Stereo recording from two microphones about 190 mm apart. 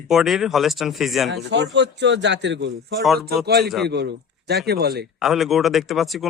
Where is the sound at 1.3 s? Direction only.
65° right (ahead or behind).